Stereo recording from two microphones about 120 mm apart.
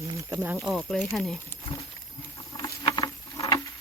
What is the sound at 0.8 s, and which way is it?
Speech, 5° left (ahead or behind).